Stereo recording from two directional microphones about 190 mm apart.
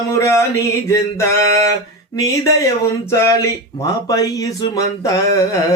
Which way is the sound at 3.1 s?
15° left (ahead or behind).